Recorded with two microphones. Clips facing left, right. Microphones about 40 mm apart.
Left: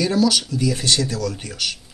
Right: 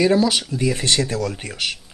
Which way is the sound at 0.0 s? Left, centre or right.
Right.